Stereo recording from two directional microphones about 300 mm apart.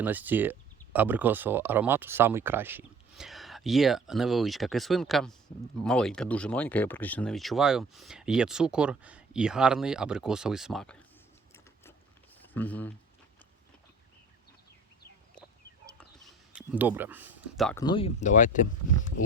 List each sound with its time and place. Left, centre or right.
0.0 s speech: centre
12.5 s speech: centre
16.0 s a sound: centre
17.8 s speech: centre